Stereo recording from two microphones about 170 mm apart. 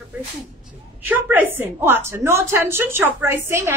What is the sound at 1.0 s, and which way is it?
A woman's voice, 10° right (ahead or behind).